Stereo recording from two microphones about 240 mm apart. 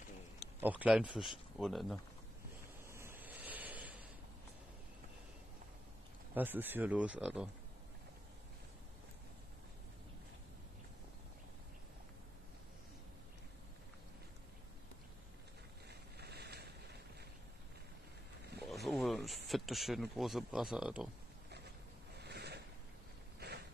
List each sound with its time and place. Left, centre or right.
0.6 s speech: centre
2.9 s vehicle: centre
6.3 s speech: centre
15.9 s boat: right
18.6 s a sound: centre
22.2 s a sound: right